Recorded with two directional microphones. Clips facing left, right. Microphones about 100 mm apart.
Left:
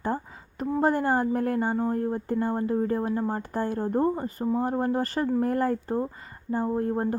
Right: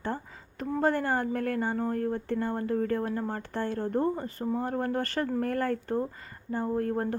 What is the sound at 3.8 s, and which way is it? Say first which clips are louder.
A woman's voice: left 3 dB; 30° left (ahead or behind).